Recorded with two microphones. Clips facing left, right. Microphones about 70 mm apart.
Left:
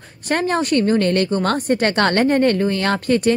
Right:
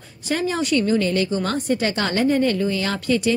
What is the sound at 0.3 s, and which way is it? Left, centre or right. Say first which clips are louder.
A woman's voice: left 3 dB; left.